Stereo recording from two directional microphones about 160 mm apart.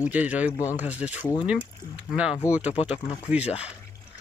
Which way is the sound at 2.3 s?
15° left (ahead or behind).